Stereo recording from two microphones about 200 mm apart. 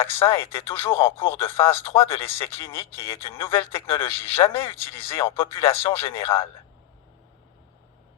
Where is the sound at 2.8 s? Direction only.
25° left (ahead or behind).